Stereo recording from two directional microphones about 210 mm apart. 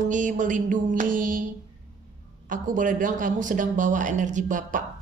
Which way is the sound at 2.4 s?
40° right (ahead or behind).